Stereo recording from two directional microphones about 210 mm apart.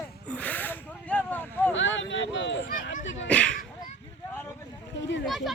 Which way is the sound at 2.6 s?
40° left (ahead or behind).